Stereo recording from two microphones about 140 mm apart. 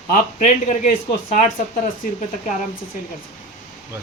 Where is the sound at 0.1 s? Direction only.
60° left (ahead or behind).